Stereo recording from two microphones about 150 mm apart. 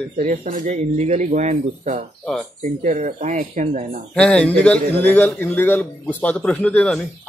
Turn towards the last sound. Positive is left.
turn(degrees=10)  # may be behind; listen again after turning